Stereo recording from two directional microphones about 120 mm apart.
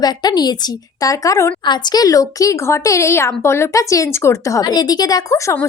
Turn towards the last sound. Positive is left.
turn(degrees=25)  # may be behind; listen again after turning